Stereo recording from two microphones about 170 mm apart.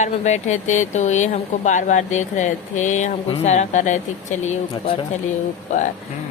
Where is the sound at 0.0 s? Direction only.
45° left (ahead or behind).